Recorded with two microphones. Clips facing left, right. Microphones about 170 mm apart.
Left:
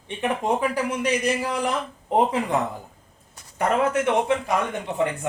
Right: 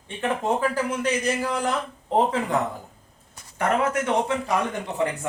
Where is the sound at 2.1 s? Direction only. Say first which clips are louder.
Left 1 dB; 15° left (ahead or behind).